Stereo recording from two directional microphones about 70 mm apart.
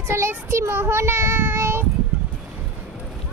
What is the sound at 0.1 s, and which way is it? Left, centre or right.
Child singing, right.